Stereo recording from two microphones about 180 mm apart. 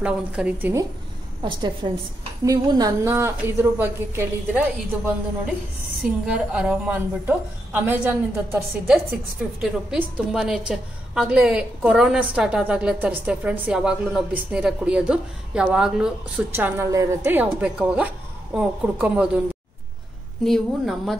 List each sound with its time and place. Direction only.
0.0 s a woman's voice: 5° right (ahead or behind)
1.4 s a woman's voice: 25° right (ahead or behind)
6.3 s a woman's voice: 5° right (ahead or behind)
20.4 s a woman's voice: centre (ahead or behind)